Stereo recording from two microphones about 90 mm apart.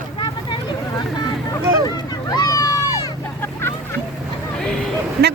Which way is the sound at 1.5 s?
45° left (ahead or behind).